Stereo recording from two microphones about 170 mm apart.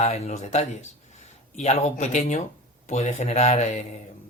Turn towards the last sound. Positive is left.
turn(degrees=40)  # may be behind; listen again after turning